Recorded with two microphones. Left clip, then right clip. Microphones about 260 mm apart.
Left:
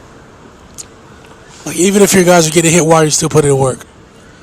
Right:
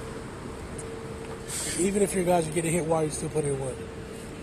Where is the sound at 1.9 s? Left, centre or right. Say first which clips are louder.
Left 17 dB; left.